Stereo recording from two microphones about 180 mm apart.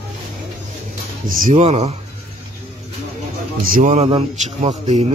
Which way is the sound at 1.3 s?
50° right (ahead or behind).